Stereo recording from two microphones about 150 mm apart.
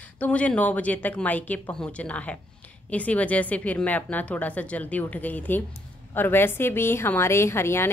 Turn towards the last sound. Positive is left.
turn(degrees=15)  # may be behind; listen again after turning